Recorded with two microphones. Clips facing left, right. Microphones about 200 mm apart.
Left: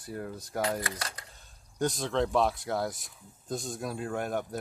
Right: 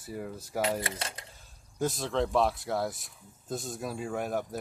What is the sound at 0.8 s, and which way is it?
Speech, 25° right (ahead or behind).